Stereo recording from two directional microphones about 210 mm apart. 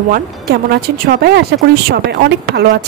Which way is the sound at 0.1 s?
45° right (ahead or behind).